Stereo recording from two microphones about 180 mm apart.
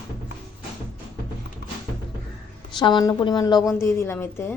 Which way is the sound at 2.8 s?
25° left (ahead or behind).